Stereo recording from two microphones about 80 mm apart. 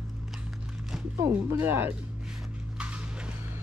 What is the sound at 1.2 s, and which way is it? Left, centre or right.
Speech, right.